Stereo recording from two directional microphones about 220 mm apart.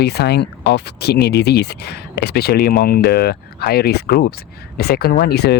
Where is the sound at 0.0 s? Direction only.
45° left (ahead or behind).